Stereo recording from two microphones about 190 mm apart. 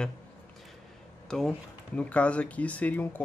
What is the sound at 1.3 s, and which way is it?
Speech, 5° left (ahead or behind).